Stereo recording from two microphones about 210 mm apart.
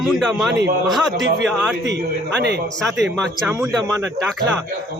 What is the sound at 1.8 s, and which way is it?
Speech, 55° right (ahead or behind).